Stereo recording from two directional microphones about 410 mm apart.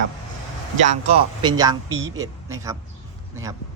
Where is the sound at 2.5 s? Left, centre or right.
Centre.